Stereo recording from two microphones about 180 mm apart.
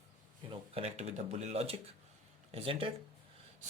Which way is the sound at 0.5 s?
35° right (ahead or behind).